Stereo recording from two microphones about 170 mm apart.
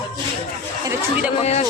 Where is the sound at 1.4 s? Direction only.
40° left (ahead or behind).